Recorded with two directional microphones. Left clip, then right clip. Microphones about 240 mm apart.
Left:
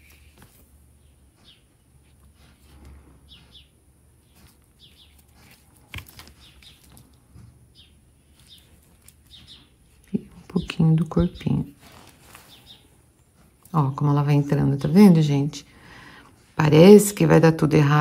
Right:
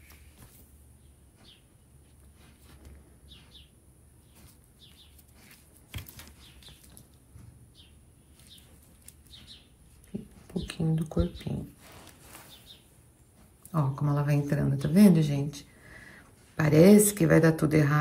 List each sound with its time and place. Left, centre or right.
4.9 s a sound: centre
8.4 s bird: centre
10.7 s speech: left
12.2 s a sound: centre
13.7 s speech: centre
16.6 s speech: centre